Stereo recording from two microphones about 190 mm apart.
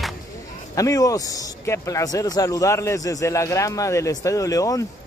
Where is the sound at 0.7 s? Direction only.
20° left (ahead or behind).